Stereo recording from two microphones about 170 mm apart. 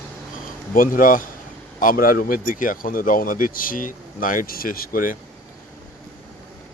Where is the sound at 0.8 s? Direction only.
55° left (ahead or behind).